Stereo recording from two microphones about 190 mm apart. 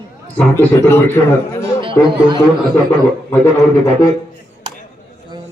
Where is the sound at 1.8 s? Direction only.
25° right (ahead or behind).